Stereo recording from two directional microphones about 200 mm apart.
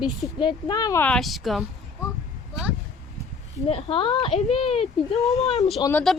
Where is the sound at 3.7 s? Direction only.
30° left (ahead or behind).